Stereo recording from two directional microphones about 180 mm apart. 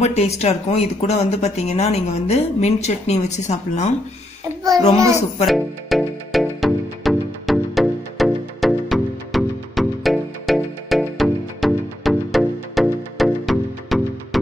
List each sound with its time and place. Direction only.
0.0 s speech: 35° left (ahead or behind)
5.5 s music: centre (ahead or behind)